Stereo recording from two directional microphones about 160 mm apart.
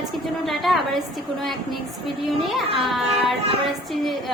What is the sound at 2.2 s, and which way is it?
A woman's voice, centre (ahead or behind).